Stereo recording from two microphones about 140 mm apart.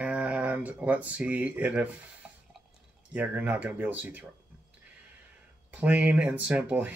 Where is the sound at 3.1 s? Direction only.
10° right (ahead or behind).